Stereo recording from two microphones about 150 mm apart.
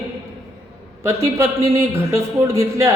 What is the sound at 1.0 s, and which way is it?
Mantra, 20° right (ahead or behind).